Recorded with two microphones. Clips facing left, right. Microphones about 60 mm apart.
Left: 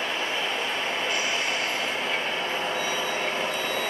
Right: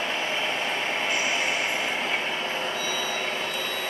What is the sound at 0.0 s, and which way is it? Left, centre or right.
Train, centre.